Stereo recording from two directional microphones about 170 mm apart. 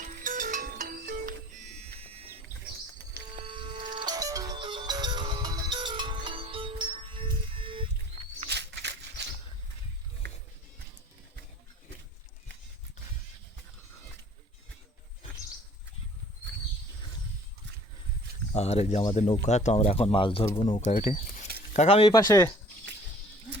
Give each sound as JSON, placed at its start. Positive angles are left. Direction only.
{"t": 0.0, "sound": "music", "side_deg": -50}
{"t": 3.3, "sound": "music", "side_deg": -30}
{"t": 8.4, "sound": "a sound", "side_deg": -85}
{"t": 18.5, "sound": "speech", "side_deg": 40}
{"t": 21.0, "sound": "a sound", "side_deg": 45}
{"t": 21.7, "sound": "speech", "side_deg": 40}
{"t": 22.1, "sound": "speech", "side_deg": 20}